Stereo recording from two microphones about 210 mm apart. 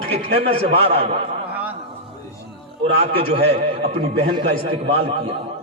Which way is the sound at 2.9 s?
30° right (ahead or behind).